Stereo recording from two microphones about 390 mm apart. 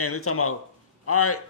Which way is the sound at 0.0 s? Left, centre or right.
Left.